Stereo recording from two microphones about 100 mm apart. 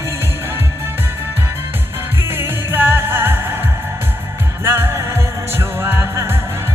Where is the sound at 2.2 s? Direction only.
25° right (ahead or behind).